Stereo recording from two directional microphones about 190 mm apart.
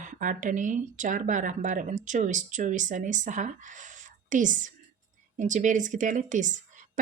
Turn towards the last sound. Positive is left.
turn(degrees=-40)  # may be behind; listen again after turning